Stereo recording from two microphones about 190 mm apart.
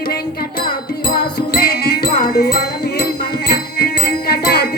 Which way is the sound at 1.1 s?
55° left (ahead or behind).